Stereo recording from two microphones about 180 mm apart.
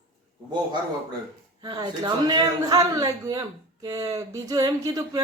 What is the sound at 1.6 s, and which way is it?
A man's voice, 25° right (ahead or behind).